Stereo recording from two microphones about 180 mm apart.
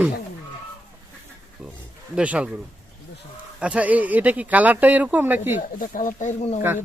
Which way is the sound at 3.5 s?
5° right (ahead or behind).